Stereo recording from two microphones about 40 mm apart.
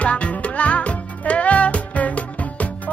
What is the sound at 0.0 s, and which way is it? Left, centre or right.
Music, left.